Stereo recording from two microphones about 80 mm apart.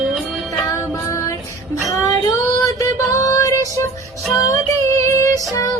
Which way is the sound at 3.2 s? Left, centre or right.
Left.